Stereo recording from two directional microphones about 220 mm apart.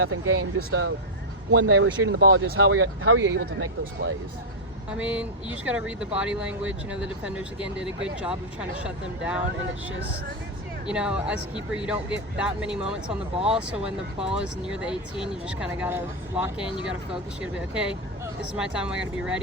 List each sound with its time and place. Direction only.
0.0 s speech: 60° right (ahead or behind)
3.3 s speech: 55° right (ahead or behind)
4.9 s speech: 5° right (ahead or behind)
10.8 s speech: 5° right (ahead or behind)